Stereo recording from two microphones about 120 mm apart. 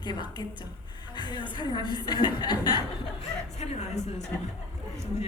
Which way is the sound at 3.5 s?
65° left (ahead or behind).